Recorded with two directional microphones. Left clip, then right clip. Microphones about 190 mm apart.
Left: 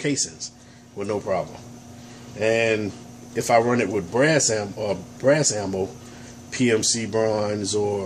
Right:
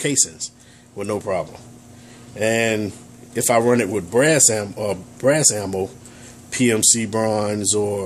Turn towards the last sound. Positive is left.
turn(degrees=-60)  # may be behind; listen again after turning